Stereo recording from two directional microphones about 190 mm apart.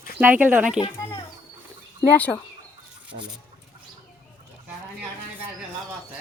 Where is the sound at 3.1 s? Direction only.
40° right (ahead or behind).